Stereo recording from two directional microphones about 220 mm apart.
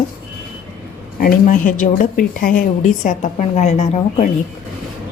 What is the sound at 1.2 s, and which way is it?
A woman's voice, 40° left (ahead or behind).